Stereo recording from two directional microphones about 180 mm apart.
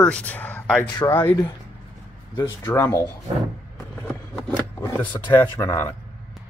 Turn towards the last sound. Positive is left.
turn(degrees=15)  # may be behind; listen again after turning